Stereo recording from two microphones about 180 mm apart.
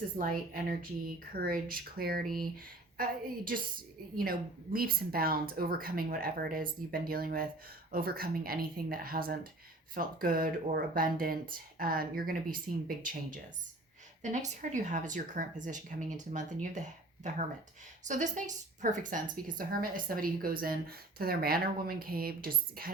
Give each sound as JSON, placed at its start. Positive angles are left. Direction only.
{"t": 0.2, "sound": "a woman's voice", "side_deg": -50}